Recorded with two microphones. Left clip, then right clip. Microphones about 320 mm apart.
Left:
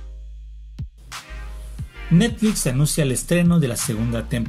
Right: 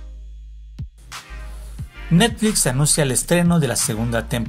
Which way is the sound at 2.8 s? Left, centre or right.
Centre.